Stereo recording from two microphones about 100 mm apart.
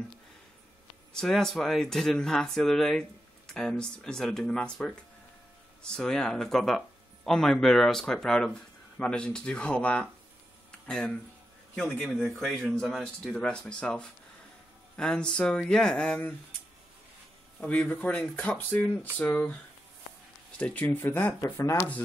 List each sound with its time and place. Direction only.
1.1 s speech: 5° left (ahead or behind)
17.6 s speech: 10° left (ahead or behind)
20.5 s speech: 15° left (ahead or behind)